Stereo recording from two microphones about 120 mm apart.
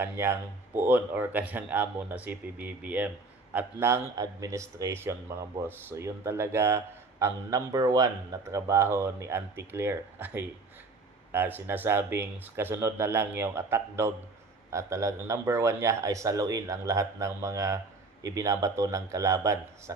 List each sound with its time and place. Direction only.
0.0 s speech: 20° right (ahead or behind)